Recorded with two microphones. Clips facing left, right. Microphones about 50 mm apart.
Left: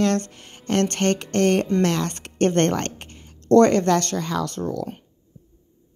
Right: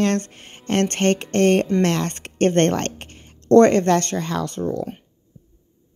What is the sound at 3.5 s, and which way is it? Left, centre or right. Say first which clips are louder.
Speech: right 2 dB; right.